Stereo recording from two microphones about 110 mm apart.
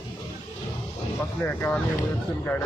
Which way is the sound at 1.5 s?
20° left (ahead or behind).